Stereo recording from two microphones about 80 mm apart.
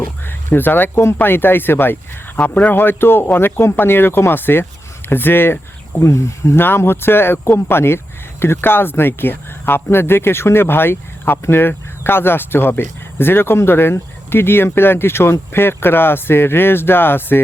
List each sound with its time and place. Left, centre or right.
0.0 s speech: left